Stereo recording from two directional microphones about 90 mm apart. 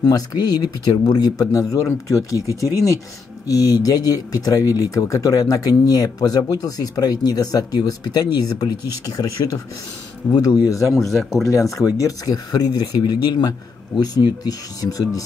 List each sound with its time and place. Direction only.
0.0 s speech: 50° left (ahead or behind)
3.4 s speech: 40° left (ahead or behind)
9.4 s speech: 60° left (ahead or behind)
10.3 s speech: 50° left (ahead or behind)
10.9 s speech: centre (ahead or behind)
11.8 s speech: 45° left (ahead or behind)